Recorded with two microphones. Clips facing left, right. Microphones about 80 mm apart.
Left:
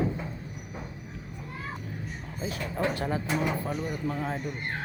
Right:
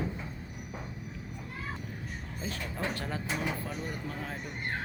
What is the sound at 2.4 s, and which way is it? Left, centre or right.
Speech, left.